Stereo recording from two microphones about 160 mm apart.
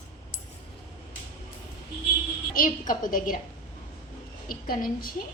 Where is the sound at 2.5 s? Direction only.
60° left (ahead or behind).